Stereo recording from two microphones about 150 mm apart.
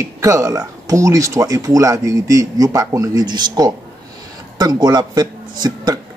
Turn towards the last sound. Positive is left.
turn(degrees=-25)  # may be behind; listen again after turning